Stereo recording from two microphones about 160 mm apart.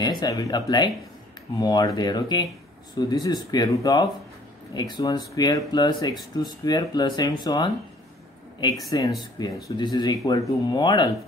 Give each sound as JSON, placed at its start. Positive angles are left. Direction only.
{"t": 0.0, "sound": "speech", "side_deg": 25}
{"t": 8.9, "sound": "speech", "side_deg": 25}